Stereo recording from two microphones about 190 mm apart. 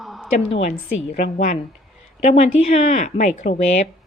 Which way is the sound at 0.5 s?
35° left (ahead or behind).